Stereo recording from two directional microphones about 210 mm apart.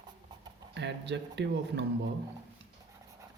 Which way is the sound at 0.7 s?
55° right (ahead or behind).